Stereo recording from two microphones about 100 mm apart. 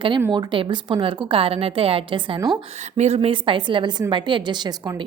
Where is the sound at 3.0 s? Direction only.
85° right; by 4.7 s 50° right (ahead or behind).